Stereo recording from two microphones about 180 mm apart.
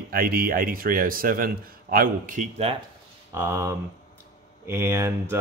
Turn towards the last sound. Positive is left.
turn(degrees=-15)  # may be behind; listen again after turning